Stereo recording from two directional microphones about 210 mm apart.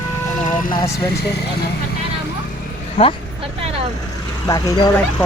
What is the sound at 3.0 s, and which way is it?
Speech, 25° left (ahead or behind).